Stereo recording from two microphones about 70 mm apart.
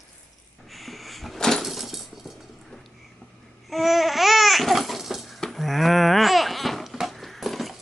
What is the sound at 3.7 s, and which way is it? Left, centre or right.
Babbling, centre.